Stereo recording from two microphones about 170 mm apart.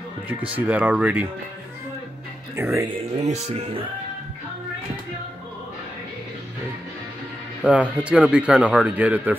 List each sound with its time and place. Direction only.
0.3 s speech: 10° right (ahead or behind)
2.5 s speech: 15° right (ahead or behind)
3.2 s speech: 40° right (ahead or behind)
7.6 s speech: 5° right (ahead or behind)